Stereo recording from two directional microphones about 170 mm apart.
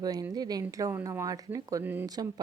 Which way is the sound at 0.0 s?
20° right (ahead or behind).